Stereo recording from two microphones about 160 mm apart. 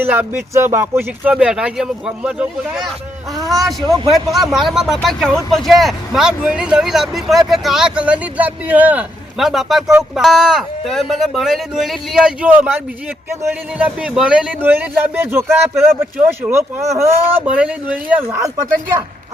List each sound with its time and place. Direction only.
0.0 s speech: 10° right (ahead or behind)
3.8 s a man's voice: 25° right (ahead or behind)
4.1 s speech: centre (ahead or behind)
16.5 s speech: 15° right (ahead or behind)